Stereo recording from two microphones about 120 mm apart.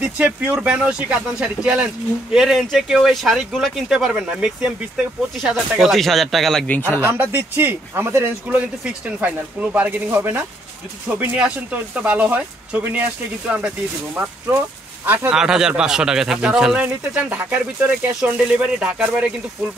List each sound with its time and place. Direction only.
0.2 s speech: 10° right (ahead or behind)
6.7 s speech: 15° left (ahead or behind)
7.1 s speech: 20° right (ahead or behind)
15.0 s speech: 10° right (ahead or behind)